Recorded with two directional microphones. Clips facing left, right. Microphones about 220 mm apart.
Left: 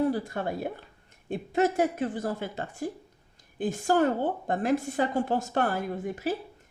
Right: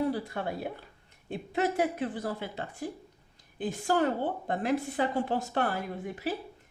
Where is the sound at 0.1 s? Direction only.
45° left (ahead or behind).